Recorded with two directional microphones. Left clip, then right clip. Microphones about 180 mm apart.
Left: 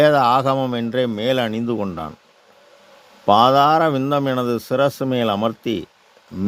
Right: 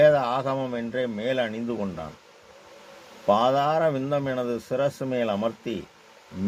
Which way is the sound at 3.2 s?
65° left (ahead or behind).